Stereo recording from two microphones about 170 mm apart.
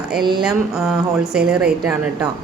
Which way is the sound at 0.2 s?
25° right (ahead or behind).